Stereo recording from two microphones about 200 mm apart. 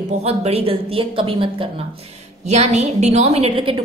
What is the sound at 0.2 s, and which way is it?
A woman's voice, 30° right (ahead or behind).